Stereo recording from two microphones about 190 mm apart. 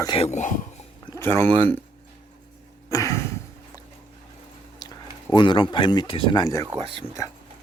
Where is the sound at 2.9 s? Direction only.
15° left (ahead or behind).